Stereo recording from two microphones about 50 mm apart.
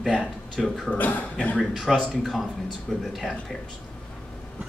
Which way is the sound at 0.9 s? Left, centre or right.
Left.